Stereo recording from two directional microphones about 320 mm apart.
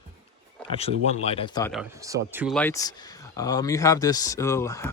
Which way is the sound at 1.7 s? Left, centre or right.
Centre.